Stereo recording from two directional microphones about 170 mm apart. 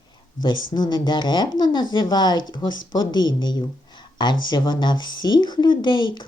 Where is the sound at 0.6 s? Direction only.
25° left (ahead or behind).